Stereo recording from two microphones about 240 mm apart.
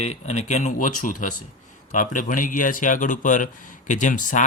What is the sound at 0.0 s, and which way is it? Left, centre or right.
Speech, left.